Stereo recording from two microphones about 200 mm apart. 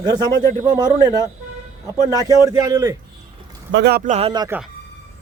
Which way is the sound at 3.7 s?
55° right (ahead or behind).